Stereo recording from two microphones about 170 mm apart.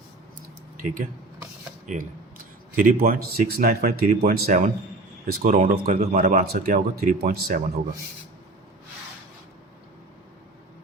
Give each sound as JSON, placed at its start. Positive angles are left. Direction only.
{"t": 0.8, "sound": "speech", "side_deg": -50}